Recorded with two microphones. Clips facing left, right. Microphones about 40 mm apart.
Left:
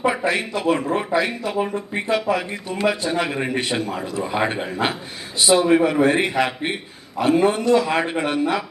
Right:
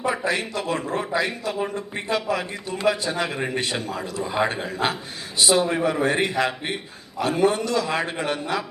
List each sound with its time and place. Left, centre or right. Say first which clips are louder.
0.0 s speech: left 3 dB; left